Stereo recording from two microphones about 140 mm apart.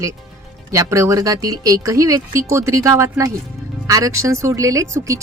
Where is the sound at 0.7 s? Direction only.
20° right (ahead or behind).